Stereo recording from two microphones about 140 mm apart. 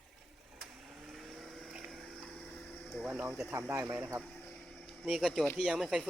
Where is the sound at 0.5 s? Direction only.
Centre (ahead or behind).